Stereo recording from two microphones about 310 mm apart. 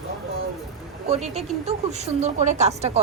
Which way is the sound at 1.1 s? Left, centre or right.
Centre.